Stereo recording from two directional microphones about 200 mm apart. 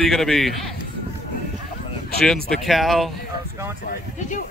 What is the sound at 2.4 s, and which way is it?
Speech, centre (ahead or behind).